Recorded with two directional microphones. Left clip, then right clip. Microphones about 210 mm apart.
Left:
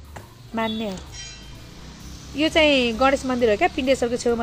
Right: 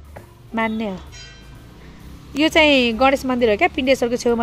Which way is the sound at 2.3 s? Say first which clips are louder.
Right 3 dB; 35° right (ahead or behind).